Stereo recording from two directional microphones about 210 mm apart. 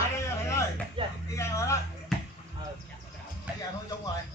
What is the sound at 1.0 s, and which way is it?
Speech, 25° right (ahead or behind).